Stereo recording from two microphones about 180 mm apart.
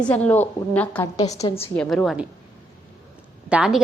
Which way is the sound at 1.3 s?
35° left (ahead or behind).